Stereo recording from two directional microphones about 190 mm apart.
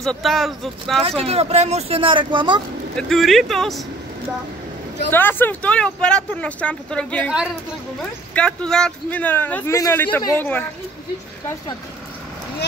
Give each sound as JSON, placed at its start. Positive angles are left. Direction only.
{"t": 0.0, "sound": "speech", "side_deg": 0}
{"t": 1.0, "sound": "speech", "side_deg": -30}
{"t": 3.0, "sound": "speech", "side_deg": 0}
{"t": 5.1, "sound": "a man's voice", "side_deg": 10}